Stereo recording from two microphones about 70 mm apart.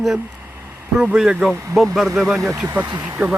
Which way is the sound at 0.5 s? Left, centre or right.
Right.